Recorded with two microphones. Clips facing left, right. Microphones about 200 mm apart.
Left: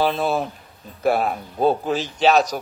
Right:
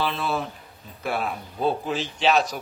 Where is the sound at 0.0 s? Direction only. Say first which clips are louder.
Left 6 dB; 45° left (ahead or behind).